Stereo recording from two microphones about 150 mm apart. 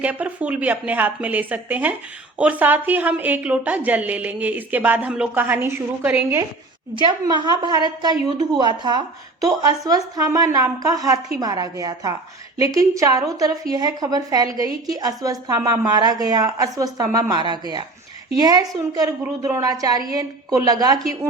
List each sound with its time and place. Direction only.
0.0 s a woman's voice: 10° right (ahead or behind)
6.9 s a woman's voice: 30° right (ahead or behind)